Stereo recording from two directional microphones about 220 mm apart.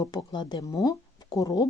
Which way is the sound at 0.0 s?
20° left (ahead or behind).